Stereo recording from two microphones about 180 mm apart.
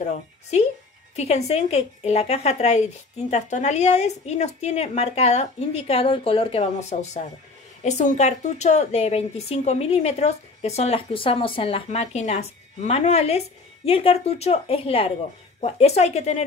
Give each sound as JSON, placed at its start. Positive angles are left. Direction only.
{"t": 0.0, "sound": "a woman's voice", "side_deg": 40}